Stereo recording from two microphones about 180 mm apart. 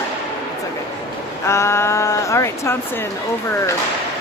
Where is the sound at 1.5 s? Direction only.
15° left (ahead or behind).